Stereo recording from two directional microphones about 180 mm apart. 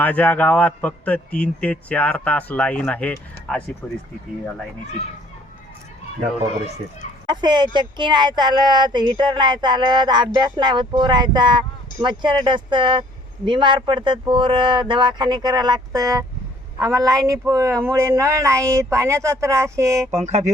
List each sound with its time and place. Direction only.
0.0 s a man's voice: 10° left (ahead or behind)
7.3 s speech: 25° right (ahead or behind)
20.1 s speech: 40° right (ahead or behind)